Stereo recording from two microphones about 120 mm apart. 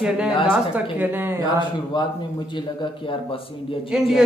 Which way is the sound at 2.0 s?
40° left (ahead or behind).